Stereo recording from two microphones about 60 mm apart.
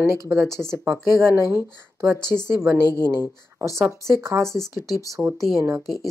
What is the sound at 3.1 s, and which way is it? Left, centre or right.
Speech, right.